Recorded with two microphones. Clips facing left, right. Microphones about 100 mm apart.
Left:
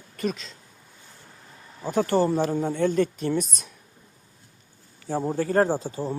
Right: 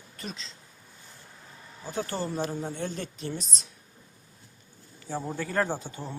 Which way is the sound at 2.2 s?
50° left (ahead or behind).